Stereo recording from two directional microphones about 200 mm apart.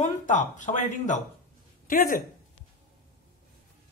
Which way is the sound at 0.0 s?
40° left (ahead or behind).